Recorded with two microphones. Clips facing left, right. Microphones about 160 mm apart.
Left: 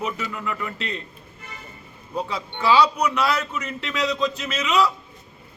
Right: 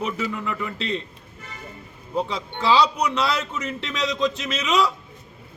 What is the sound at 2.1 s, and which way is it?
A man's voice, 25° right (ahead or behind).